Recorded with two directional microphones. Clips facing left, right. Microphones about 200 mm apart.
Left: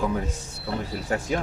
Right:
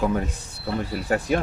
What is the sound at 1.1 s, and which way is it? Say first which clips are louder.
Speech: right 4 dB; 60° right (ahead or behind).